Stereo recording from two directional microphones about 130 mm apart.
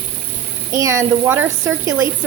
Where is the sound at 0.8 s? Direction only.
25° right (ahead or behind).